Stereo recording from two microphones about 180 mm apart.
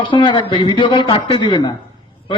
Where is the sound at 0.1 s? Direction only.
25° left (ahead or behind).